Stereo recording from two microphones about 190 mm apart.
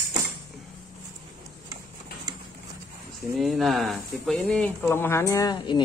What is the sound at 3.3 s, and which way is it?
Speech, centre (ahead or behind).